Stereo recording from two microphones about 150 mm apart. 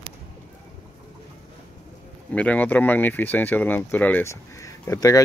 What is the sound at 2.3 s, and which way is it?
Speech, 10° left (ahead or behind).